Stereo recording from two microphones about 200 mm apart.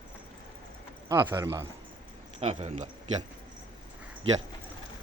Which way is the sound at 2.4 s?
30° right (ahead or behind).